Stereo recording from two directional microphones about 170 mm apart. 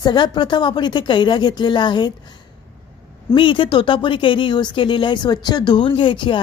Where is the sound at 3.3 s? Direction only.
30° left (ahead or behind).